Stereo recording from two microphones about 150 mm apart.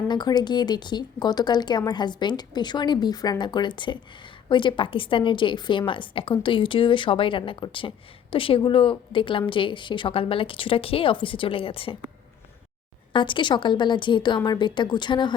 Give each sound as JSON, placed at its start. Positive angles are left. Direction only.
{"t": 0.1, "sound": "a woman's voice", "side_deg": 30}
{"t": 13.1, "sound": "a woman's voice", "side_deg": 35}